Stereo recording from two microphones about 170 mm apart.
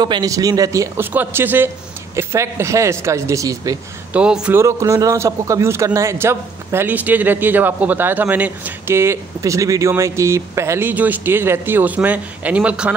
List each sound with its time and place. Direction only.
0.0 s a man's voice: 20° right (ahead or behind)
4.1 s a man's voice: 5° right (ahead or behind)
4.6 s a man's voice: 15° right (ahead or behind)